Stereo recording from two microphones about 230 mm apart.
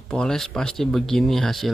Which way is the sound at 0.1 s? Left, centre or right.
Centre.